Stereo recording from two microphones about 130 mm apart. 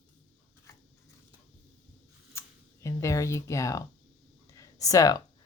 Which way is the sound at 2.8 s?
25° left (ahead or behind).